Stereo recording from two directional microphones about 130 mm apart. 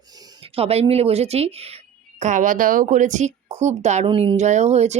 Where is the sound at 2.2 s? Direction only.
75° right (ahead or behind).